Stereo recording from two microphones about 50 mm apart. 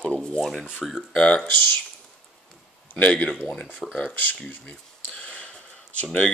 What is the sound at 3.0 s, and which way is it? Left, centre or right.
Speech, left.